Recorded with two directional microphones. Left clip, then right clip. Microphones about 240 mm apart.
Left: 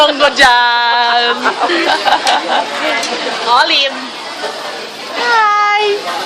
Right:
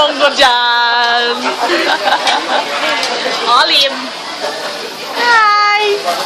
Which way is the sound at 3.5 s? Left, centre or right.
Centre.